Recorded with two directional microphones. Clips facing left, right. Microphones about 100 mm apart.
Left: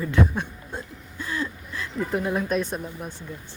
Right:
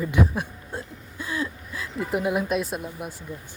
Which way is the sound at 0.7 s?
10° right (ahead or behind).